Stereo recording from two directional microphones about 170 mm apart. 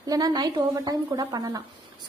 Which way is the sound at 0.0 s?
20° right (ahead or behind).